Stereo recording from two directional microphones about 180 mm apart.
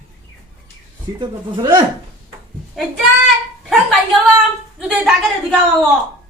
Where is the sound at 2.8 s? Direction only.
Centre (ahead or behind).